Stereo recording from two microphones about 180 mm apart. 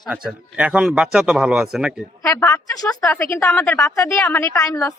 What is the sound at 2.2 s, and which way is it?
A woman's voice, 20° left (ahead or behind).